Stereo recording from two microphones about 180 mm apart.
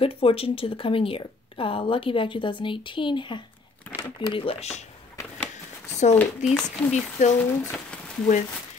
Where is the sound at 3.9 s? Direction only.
10° right (ahead or behind).